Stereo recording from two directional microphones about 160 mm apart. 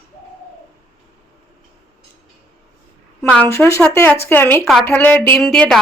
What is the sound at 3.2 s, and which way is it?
Speech, 10° left (ahead or behind).